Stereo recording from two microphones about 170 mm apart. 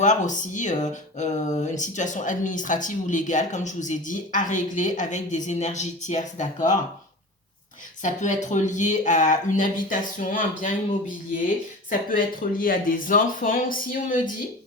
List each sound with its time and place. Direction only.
0.0 s speech: 45° left (ahead or behind)
8.0 s speech: 45° left (ahead or behind)